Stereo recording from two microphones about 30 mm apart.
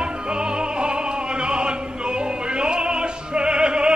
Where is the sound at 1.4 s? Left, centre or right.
Right.